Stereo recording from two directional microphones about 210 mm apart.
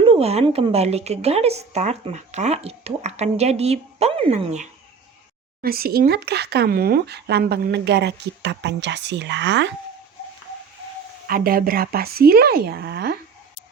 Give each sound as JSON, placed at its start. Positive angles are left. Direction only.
{"t": 0.0, "sound": "speech", "side_deg": -25}
{"t": 5.6, "sound": "speech", "side_deg": -45}
{"t": 11.3, "sound": "speech", "side_deg": -45}